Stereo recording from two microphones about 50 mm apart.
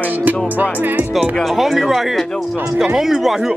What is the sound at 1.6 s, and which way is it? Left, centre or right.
Speech, centre.